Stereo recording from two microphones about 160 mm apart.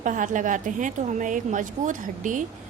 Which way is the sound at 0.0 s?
55° right (ahead or behind).